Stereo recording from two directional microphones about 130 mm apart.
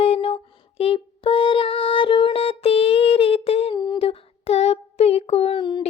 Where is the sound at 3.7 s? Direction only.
35° left (ahead or behind).